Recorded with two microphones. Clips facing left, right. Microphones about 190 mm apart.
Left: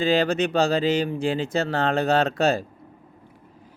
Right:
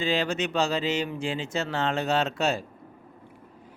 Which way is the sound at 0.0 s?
35° left (ahead or behind).